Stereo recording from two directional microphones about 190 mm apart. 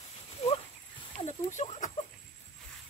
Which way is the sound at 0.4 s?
30° left (ahead or behind).